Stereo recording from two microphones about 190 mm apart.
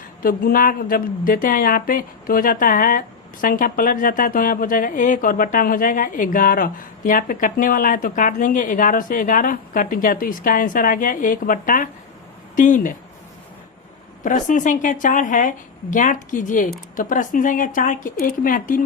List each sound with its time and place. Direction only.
0.2 s a woman's voice: 50° left (ahead or behind)
14.3 s a woman's voice: 40° left (ahead or behind)